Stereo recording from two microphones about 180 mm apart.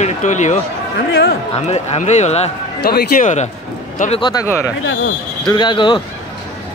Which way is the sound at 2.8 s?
60° left (ahead or behind).